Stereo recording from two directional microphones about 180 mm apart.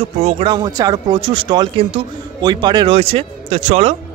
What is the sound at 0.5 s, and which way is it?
Speech, 20° right (ahead or behind).